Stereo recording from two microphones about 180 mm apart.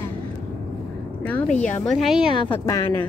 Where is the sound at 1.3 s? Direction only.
5° left (ahead or behind).